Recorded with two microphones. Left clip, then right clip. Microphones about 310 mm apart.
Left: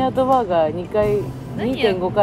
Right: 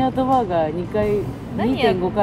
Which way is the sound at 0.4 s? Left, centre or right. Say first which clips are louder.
Left 2 dB; centre.